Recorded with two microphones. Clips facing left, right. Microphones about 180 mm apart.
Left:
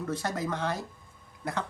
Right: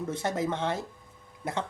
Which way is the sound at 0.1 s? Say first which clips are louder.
Right 2 dB; 25° right (ahead or behind).